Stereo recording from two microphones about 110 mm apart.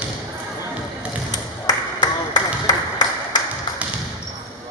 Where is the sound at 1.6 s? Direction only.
35° left (ahead or behind).